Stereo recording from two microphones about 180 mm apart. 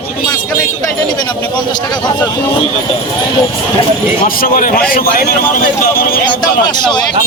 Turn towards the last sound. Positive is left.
turn(degrees=25)  # may be behind; listen again after turning